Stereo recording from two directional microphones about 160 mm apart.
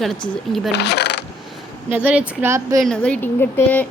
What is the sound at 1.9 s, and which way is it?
Speech, 10° right (ahead or behind).